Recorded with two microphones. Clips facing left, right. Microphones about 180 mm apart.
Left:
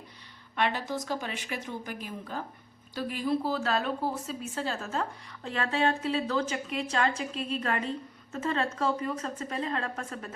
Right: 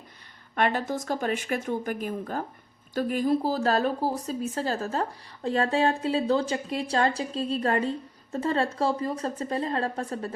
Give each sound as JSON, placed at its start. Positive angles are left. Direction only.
{"t": 0.5, "sound": "a woman's voice", "side_deg": -50}